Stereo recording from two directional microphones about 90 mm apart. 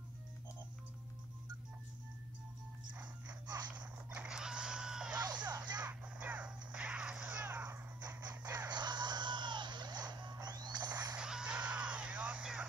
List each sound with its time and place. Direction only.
3.7 s mechanisms: 15° right (ahead or behind)
5.2 s music: 55° right (ahead or behind)
5.8 s whip: 15° right (ahead or behind)
8.6 s chicken: 55° right (ahead or behind)
11.1 s music: 10° right (ahead or behind)